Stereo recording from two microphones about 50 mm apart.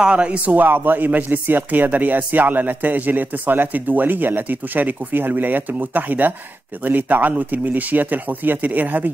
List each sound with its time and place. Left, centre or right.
0.0 s speech: right
0.6 s a man's voice: right